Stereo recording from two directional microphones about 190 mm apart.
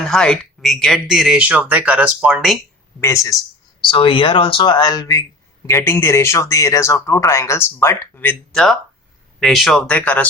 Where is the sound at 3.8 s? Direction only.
25° left (ahead or behind).